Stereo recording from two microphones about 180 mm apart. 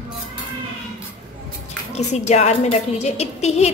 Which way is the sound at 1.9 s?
40° left (ahead or behind).